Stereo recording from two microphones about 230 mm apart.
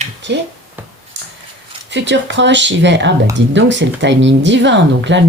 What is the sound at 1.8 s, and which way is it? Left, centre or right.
Speech, right.